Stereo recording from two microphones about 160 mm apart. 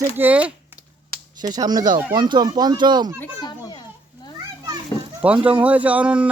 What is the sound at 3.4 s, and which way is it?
Children playing, 30° left (ahead or behind).